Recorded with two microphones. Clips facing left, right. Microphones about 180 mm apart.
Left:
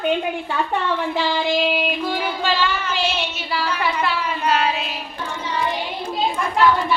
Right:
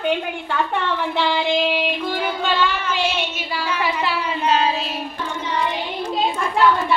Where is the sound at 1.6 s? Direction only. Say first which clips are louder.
Even; centre (ahead or behind).